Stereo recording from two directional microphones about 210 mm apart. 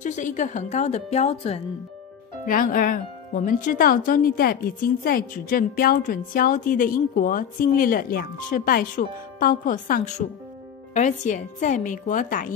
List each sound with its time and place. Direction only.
0.0 s speech: 35° left (ahead or behind)